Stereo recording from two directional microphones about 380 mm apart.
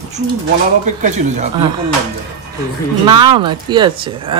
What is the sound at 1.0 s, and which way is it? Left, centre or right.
Speech, centre.